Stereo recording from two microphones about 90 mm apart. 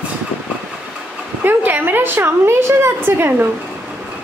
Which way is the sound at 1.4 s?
20° right (ahead or behind).